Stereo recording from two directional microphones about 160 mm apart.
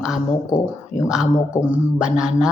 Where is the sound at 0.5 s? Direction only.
15° left (ahead or behind).